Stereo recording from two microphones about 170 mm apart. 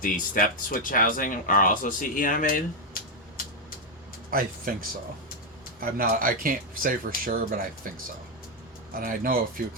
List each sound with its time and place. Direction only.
0.0 s speech: 55° left (ahead or behind)
4.3 s speech: 55° right (ahead or behind)
8.9 s speech: 60° right (ahead or behind)